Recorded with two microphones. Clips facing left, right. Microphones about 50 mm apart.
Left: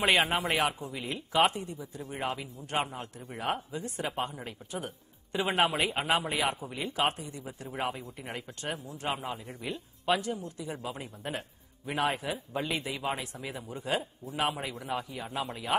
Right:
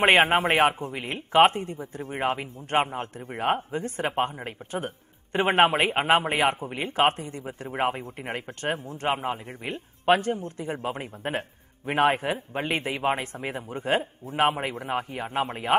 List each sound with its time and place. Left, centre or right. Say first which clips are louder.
0.0 s speech: right 7 dB; right